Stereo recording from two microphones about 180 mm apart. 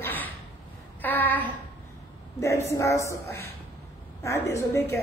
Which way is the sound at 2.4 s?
15° left (ahead or behind).